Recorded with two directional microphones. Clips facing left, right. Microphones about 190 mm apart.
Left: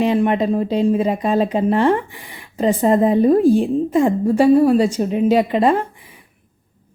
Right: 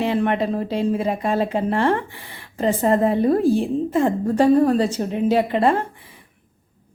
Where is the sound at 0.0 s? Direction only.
15° left (ahead or behind).